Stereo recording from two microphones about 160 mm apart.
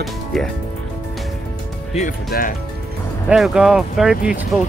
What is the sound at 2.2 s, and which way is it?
Speech, 65° left (ahead or behind).